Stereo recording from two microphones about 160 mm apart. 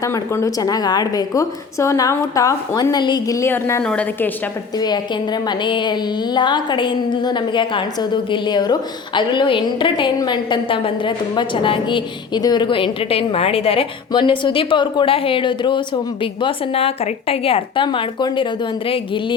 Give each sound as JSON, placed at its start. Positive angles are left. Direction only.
{"t": 0.0, "sound": "a woman's voice", "side_deg": 20}
{"t": 5.5, "sound": "a woman's voice", "side_deg": 30}